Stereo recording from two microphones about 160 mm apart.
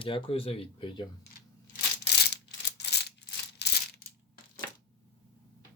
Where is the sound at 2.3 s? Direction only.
90° left.